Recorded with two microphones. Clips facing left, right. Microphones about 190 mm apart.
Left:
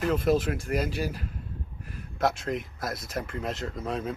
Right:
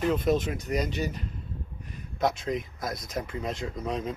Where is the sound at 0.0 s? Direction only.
5° left (ahead or behind).